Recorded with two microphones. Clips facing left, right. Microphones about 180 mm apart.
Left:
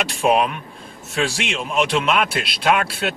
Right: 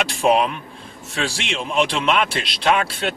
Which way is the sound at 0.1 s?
5° left (ahead or behind).